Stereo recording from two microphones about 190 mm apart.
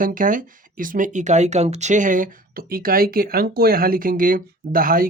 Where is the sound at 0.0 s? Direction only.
45° right (ahead or behind).